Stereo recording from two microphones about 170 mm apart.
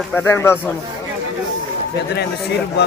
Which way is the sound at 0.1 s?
10° left (ahead or behind).